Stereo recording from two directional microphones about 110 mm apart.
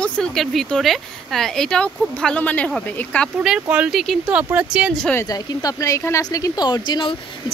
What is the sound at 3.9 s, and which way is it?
Speech, centre (ahead or behind).